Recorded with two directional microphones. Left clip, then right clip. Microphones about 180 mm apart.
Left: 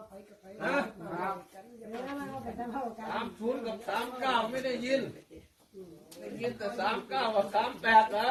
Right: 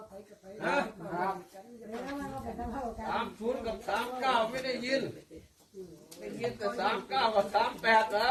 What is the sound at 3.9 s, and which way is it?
Speech, 15° left (ahead or behind).